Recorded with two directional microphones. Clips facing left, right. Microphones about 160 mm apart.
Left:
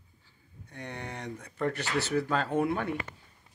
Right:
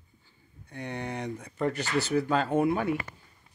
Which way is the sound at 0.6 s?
Centre (ahead or behind).